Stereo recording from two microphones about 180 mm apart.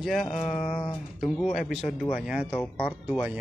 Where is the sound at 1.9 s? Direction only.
5° right (ahead or behind).